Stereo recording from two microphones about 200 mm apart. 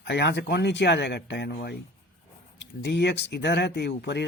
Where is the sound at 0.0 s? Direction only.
55° left (ahead or behind).